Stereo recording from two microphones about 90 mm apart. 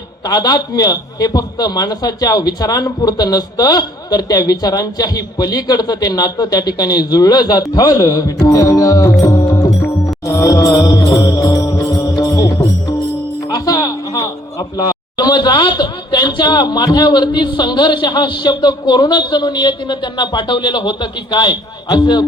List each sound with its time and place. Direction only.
0.3 s a man's voice: 45° left (ahead or behind)
8.4 s music: 40° left (ahead or behind)
13.5 s a sound: 45° left (ahead or behind)
14.8 s a man's voice: 50° left (ahead or behind)